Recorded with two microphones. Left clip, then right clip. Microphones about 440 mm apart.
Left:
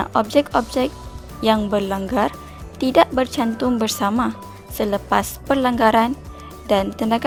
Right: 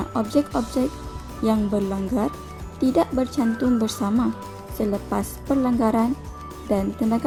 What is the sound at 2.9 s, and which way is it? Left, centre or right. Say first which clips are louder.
A woman's voice: left 8 dB; centre.